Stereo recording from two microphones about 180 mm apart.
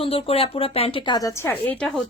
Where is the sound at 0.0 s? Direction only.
30° left (ahead or behind).